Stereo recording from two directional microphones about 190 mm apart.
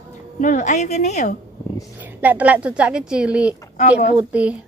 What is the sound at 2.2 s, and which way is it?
A woman's voice, 10° right (ahead or behind).